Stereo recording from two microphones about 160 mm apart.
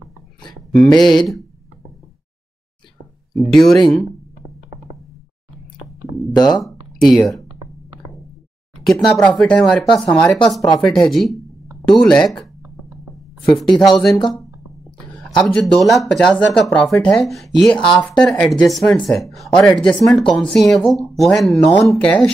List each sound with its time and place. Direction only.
0.5 s a sound: 5° left (ahead or behind)
0.9 s speech: centre (ahead or behind)
3.3 s speech: centre (ahead or behind)
6.3 s speech: 25° left (ahead or behind)
6.6 s speech: centre (ahead or behind)
8.8 s speech: 5° left (ahead or behind)
12.6 s a sound: 15° right (ahead or behind)
13.6 s speech: centre (ahead or behind)
15.1 s speech: 5° left (ahead or behind)